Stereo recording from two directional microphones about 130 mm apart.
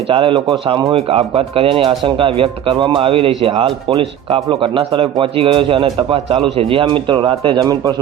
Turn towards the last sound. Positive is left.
turn(degrees=-30)  # may be behind; listen again after turning